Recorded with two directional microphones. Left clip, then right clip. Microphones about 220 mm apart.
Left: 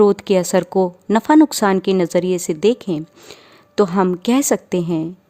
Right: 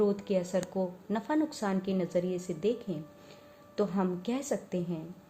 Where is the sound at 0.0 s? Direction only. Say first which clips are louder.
Left 15 dB; 50° left (ahead or behind).